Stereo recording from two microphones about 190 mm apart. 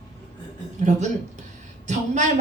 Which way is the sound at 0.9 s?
40° right (ahead or behind).